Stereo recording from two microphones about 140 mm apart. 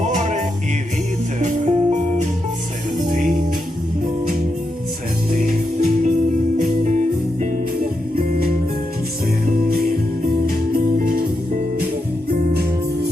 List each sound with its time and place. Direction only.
0.0 s music: 60° right (ahead or behind)
5.3 s music: 75° right (ahead or behind)
7.5 s music: 90° right
10.4 s music: 90° right